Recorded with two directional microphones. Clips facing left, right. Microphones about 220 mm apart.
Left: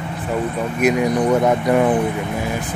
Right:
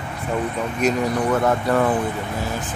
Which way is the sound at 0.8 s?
10° left (ahead or behind).